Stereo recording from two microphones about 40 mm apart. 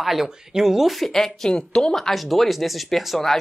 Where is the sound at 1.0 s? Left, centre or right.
Centre.